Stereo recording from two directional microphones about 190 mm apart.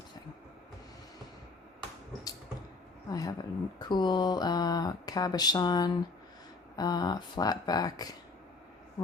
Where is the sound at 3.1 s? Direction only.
20° left (ahead or behind).